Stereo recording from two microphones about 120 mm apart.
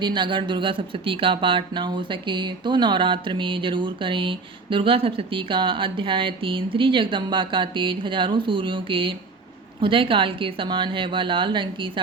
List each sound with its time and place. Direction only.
0.0 s speech: 40° right (ahead or behind)